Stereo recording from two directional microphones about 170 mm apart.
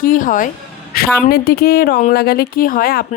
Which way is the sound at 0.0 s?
50° left (ahead or behind).